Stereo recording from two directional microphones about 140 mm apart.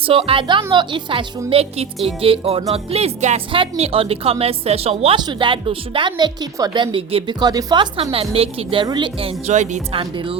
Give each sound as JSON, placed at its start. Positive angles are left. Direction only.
{"t": 0.0, "sound": "a woman's voice", "side_deg": -40}
{"t": 1.5, "sound": "a woman's voice", "side_deg": -45}
{"t": 5.1, "sound": "a woman's voice", "side_deg": -35}
{"t": 8.1, "sound": "a woman's voice", "side_deg": -45}
{"t": 9.5, "sound": "speech", "side_deg": -60}
{"t": 9.9, "sound": "a woman's voice", "side_deg": -40}